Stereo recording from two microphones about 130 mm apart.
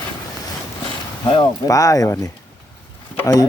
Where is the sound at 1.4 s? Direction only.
25° left (ahead or behind).